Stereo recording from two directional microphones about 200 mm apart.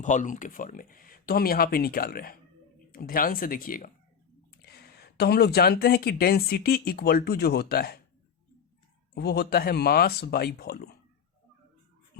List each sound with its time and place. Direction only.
0.0 s speech: 40° left (ahead or behind)
9.1 s speech: 55° left (ahead or behind)